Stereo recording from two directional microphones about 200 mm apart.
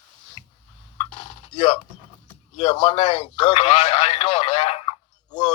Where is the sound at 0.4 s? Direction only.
30° left (ahead or behind).